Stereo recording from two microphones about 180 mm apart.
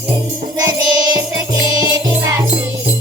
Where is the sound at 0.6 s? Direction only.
20° right (ahead or behind).